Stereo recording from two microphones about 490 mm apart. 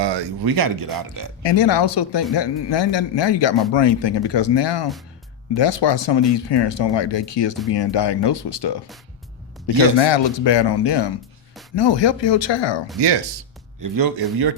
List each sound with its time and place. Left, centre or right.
0.0 s speech: right
1.4 s speech: left
13.8 s speech: right